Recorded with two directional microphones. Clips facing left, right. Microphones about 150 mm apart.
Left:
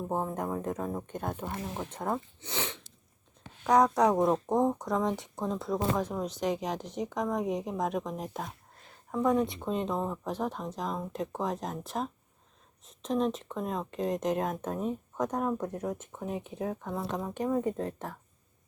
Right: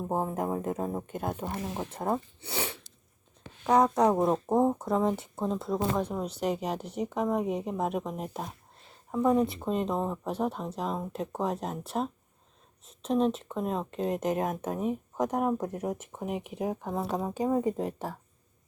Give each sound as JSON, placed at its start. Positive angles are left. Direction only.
{"t": 0.1, "sound": "speech", "side_deg": -5}
{"t": 1.4, "sound": "speech", "side_deg": -25}
{"t": 2.4, "sound": "sneeze", "side_deg": -10}
{"t": 3.7, "sound": "speech", "side_deg": 0}
{"t": 12.9, "sound": "speech", "side_deg": -35}
{"t": 13.3, "sound": "speech", "side_deg": 0}
{"t": 17.3, "sound": "speech", "side_deg": -15}